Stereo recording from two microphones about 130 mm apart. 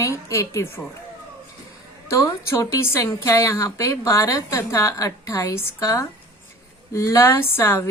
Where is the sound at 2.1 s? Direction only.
20° left (ahead or behind).